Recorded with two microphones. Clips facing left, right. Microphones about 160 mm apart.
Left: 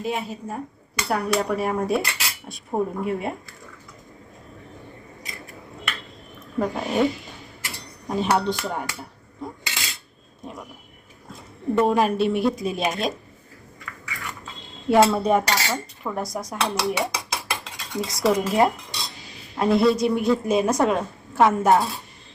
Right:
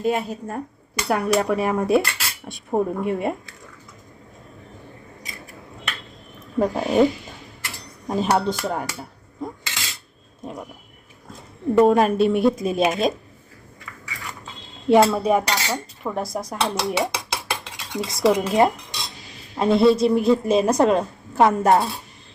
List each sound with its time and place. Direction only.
0.0 s speech: centre (ahead or behind)
5.2 s scissors: centre (ahead or behind)
6.6 s speech: centre (ahead or behind)
7.8 s dishes: centre (ahead or behind)
11.3 s speech: centre (ahead or behind)
14.8 s speech: centre (ahead or behind)
18.6 s cutlery: centre (ahead or behind)
19.5 s speech: centre (ahead or behind)